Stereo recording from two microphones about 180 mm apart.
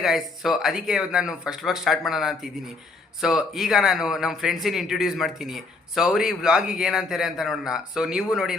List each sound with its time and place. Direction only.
0.0 s speech: centre (ahead or behind)